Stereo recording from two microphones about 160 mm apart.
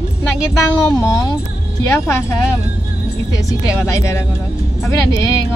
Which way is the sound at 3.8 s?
20° left (ahead or behind).